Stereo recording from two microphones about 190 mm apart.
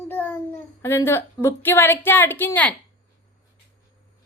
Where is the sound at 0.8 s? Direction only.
10° left (ahead or behind).